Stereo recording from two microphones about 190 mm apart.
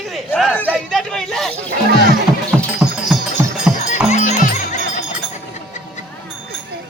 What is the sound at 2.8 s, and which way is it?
Wind chime, centre (ahead or behind).